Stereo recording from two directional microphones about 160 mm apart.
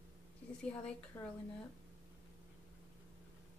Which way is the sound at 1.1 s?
20° left (ahead or behind).